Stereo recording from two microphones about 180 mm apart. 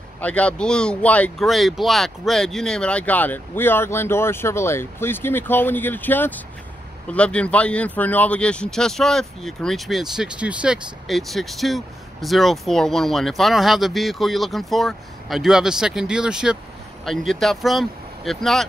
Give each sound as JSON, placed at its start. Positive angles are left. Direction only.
{"t": 0.2, "sound": "speech", "side_deg": 5}